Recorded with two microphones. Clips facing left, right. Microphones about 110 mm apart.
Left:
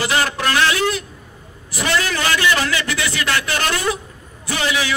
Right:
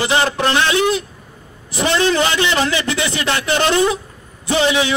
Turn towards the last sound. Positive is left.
turn(degrees=-25)  # may be behind; listen again after turning